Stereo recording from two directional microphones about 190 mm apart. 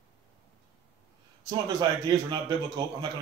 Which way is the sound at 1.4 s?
20° right (ahead or behind).